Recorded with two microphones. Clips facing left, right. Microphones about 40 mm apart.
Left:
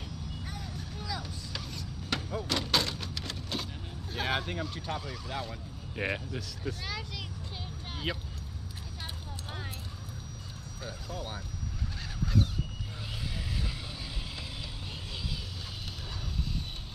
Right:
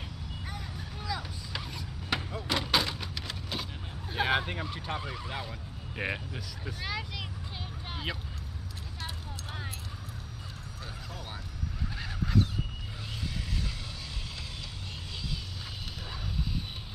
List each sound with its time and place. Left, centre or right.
0.5 s vehicle: centre
4.1 s speech: centre
5.4 s speech: centre